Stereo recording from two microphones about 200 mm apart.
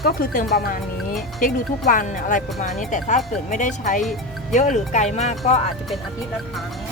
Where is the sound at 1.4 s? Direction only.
45° left (ahead or behind).